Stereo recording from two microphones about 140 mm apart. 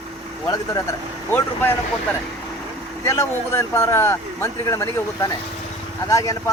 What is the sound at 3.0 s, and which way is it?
Speech, 20° left (ahead or behind).